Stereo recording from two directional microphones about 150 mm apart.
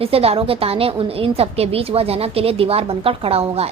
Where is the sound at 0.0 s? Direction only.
40° right (ahead or behind).